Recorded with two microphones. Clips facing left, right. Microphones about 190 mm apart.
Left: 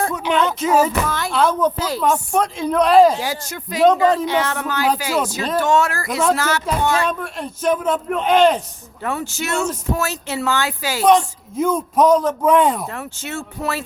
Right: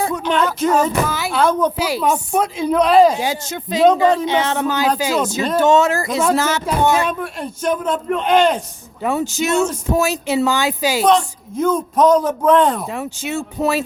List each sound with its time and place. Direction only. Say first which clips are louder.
0.0 s speech: right 1 dB; centre (ahead or behind)
1.1 s speech: right 1 dB; 5° right (ahead or behind)
1.8 s speech: right 1 dB; 10° right (ahead or behind)
3.2 s speech: right 3 dB; 20° right (ahead or behind)
4.0 s speech: right 1 dB; centre (ahead or behind)
4.3 s speech: right 3 dB; 20° right (ahead or behind)
7.1 s speech: right 1 dB; 5° right (ahead or behind)
9.0 s speech: right 5 dB; 15° right (ahead or behind)
11.0 s a man's voice: left 3 dB; 10° left (ahead or behind)
12.9 s speech: right 5 dB; 15° right (ahead or behind)